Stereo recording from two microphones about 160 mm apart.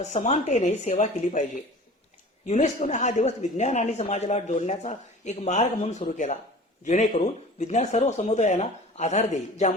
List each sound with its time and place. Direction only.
0.0 s speech: 45° left (ahead or behind)